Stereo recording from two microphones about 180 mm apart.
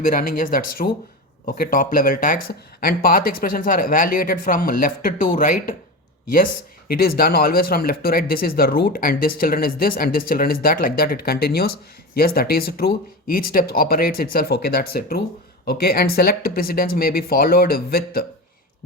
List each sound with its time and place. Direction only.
0.0 s speech: 50° left (ahead or behind)